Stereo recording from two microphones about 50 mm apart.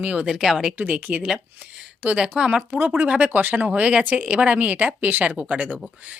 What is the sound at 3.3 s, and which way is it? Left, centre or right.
Speech, right.